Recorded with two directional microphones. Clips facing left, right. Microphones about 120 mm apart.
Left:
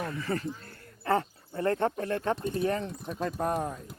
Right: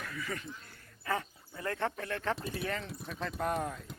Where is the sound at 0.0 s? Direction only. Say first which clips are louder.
Left 8 dB; 30° left (ahead or behind).